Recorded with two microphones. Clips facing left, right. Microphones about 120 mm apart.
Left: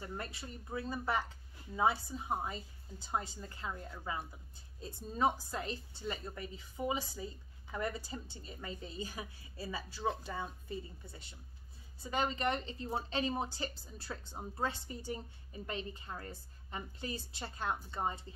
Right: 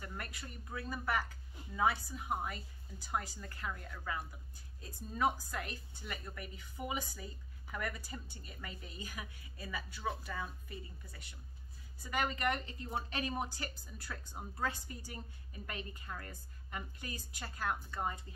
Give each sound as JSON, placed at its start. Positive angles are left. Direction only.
{"t": 0.0, "sound": "speech", "side_deg": 25}